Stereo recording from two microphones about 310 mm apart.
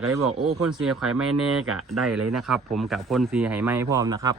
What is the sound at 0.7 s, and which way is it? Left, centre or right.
Speech, centre.